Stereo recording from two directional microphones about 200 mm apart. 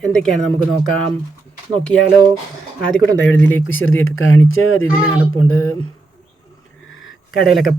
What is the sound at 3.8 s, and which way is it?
Speech, 80° left.